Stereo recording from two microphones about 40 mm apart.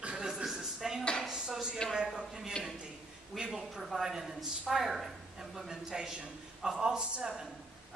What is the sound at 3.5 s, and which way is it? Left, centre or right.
A man's voice, centre.